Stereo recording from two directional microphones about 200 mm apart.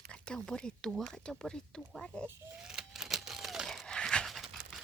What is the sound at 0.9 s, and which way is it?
Speech, centre (ahead or behind).